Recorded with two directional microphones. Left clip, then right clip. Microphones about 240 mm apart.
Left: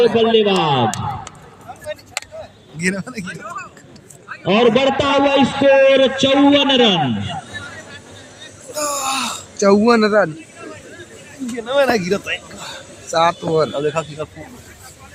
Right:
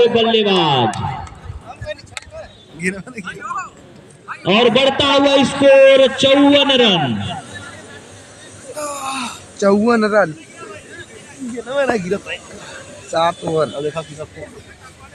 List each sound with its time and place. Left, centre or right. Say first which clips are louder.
0.0 s a man's voice: even; right
2.7 s speech: left 2 dB; left
3.2 s a man's voice: right 4 dB; right
8.7 s a sound: left 3 dB; left
9.6 s speech: left 1 dB; centre
11.5 s speech: left 2 dB; left
13.1 s speech: left 1 dB; centre